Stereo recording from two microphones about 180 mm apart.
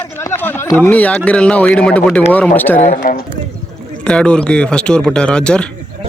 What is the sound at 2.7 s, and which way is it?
Speech, 45° left (ahead or behind).